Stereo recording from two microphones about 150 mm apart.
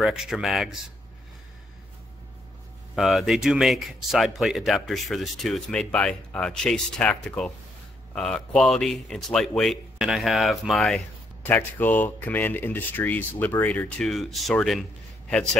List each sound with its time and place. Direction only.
0.0 s speech: 5° right (ahead or behind)
3.0 s speech: centre (ahead or behind)
11.4 s speech: 10° left (ahead or behind)